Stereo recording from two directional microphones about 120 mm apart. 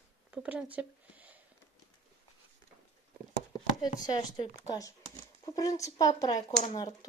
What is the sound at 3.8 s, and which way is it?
Speech, 35° left (ahead or behind).